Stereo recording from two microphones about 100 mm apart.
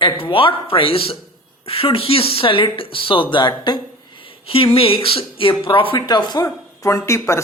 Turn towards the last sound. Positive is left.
turn(degrees=30)  # may be behind; listen again after turning